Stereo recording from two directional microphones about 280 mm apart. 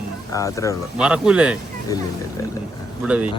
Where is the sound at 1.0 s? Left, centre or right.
Centre.